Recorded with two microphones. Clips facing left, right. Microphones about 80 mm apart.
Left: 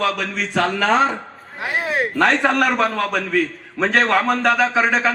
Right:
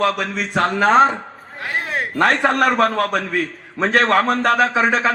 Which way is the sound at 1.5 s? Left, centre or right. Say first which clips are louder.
Left 2 dB; centre.